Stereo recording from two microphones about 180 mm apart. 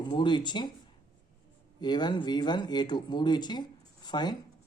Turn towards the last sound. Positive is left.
turn(degrees=25)  # may be behind; listen again after turning